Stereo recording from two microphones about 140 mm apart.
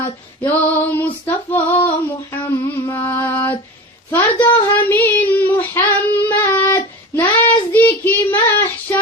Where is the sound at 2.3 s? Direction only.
15° left (ahead or behind).